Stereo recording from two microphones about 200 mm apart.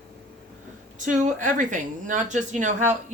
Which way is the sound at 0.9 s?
40° right (ahead or behind).